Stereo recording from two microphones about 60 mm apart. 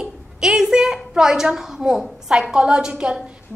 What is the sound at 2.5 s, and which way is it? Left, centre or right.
Speech, centre.